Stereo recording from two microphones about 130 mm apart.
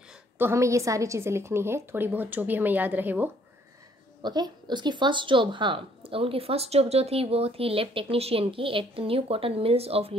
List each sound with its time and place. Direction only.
0.4 s a woman's voice: 20° right (ahead or behind)
4.2 s speech: 35° right (ahead or behind); by 10.1 s 50° right (ahead or behind)